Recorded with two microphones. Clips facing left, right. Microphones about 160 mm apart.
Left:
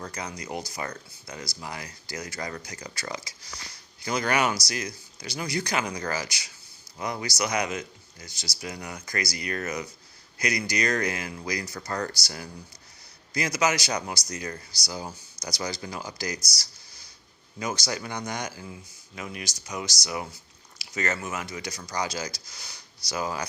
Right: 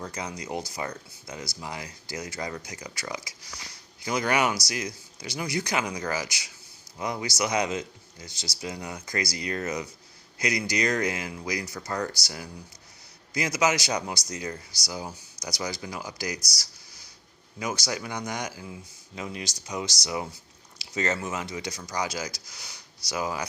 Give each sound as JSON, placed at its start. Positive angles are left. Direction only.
{"t": 0.1, "sound": "speech", "side_deg": -25}
{"t": 17.9, "sound": "speech", "side_deg": -10}
{"t": 19.1, "sound": "speech", "side_deg": -25}
{"t": 21.9, "sound": "speech", "side_deg": -15}